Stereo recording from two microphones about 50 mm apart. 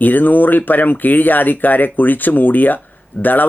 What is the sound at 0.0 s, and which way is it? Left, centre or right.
Speech, left.